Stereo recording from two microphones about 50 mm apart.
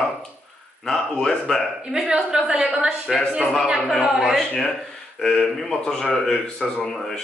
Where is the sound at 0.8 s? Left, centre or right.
Centre.